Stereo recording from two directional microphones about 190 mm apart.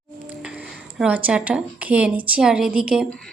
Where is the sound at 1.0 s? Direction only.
10° right (ahead or behind).